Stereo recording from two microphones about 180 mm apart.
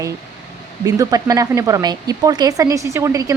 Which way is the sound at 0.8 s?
20° right (ahead or behind).